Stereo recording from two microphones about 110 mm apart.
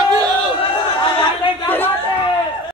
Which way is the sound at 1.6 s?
20° left (ahead or behind).